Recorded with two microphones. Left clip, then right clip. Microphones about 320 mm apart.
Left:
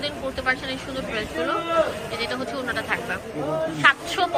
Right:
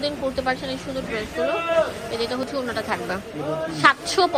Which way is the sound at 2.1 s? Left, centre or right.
Centre.